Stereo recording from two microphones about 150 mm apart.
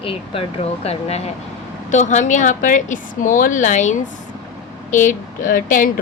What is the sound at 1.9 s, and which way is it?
Speech, 55° left (ahead or behind).